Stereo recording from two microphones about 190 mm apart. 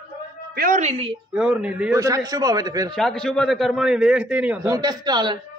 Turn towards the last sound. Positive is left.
turn(degrees=-20)  # may be behind; listen again after turning